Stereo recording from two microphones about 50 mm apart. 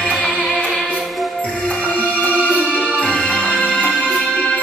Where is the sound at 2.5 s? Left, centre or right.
Left.